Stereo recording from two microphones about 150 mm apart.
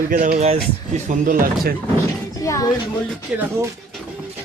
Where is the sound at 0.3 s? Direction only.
50° right (ahead or behind); by 1.7 s 65° right (ahead or behind).